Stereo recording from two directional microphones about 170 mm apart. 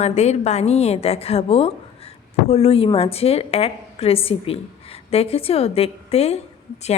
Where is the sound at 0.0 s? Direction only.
40° left (ahead or behind).